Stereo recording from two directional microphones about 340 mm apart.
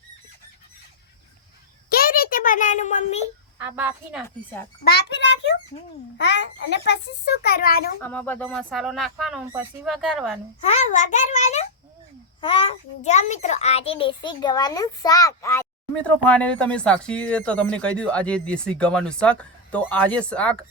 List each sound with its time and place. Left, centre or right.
1.9 s a sound: left
3.6 s a child's voice: centre
4.8 s a child's voice: left
8.0 s a child's voice: centre
10.6 s a child's voice: left; by 20.6 s centre